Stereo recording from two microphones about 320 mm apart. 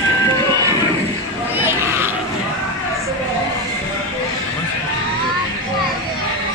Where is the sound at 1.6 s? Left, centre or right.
Centre.